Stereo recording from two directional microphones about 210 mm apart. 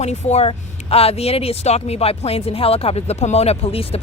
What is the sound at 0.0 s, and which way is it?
Speech, 30° left (ahead or behind).